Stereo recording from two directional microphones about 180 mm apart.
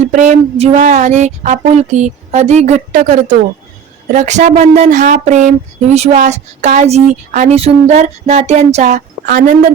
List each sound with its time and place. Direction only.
0.1 s a woman's voice: 45° right (ahead or behind)